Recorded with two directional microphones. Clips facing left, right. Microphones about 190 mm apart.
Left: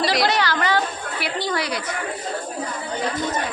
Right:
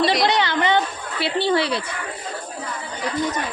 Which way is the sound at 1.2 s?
30° right (ahead or behind).